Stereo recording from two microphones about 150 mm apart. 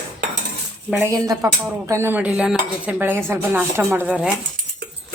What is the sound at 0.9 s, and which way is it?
Dishes, 10° right (ahead or behind).